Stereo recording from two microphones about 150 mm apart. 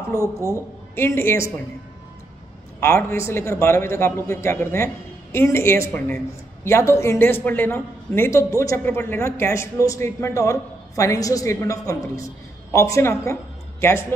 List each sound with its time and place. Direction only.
0.1 s speech: 15° right (ahead or behind)
0.9 s a man's voice: 15° left (ahead or behind)
2.8 s a man's voice: 15° left (ahead or behind)